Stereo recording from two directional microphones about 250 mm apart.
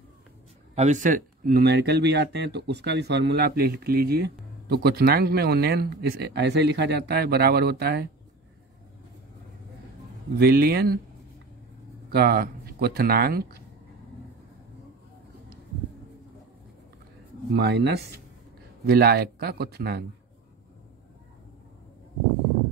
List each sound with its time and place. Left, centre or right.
0.7 s speech: right
10.4 s speech: right
12.1 s speech: right
17.6 s speech: right